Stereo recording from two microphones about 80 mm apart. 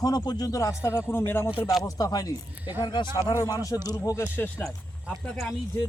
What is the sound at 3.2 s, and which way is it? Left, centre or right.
Speech, left.